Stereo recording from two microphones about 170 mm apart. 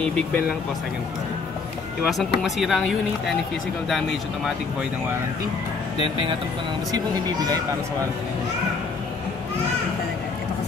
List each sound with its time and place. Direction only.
0.0 s speech: 5° left (ahead or behind)
2.0 s speech: centre (ahead or behind)
6.9 s speech: 25° right (ahead or behind)